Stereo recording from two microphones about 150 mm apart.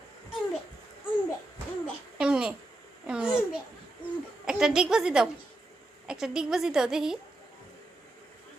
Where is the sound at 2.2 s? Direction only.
5° right (ahead or behind).